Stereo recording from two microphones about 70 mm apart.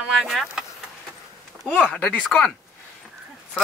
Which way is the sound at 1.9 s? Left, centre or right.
Centre.